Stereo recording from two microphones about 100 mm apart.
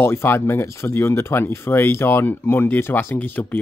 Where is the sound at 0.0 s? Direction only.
20° left (ahead or behind).